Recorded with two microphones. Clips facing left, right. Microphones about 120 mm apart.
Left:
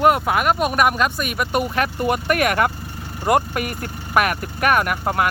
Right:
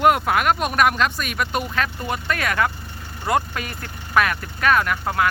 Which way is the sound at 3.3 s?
35° left (ahead or behind).